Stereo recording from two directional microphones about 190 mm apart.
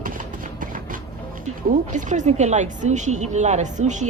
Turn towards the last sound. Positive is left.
turn(degrees=-40)  # may be behind; listen again after turning